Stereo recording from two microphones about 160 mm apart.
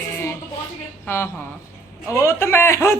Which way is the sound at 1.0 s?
15° left (ahead or behind).